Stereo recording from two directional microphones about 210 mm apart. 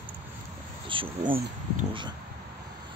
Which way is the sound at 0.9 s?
25° right (ahead or behind).